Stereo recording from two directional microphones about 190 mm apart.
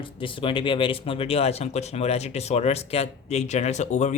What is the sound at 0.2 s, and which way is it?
Speech, 25° left (ahead or behind).